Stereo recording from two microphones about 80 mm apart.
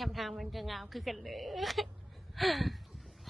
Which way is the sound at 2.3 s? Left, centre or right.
Centre.